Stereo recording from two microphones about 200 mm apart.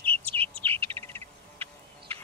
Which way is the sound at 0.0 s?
5° left (ahead or behind).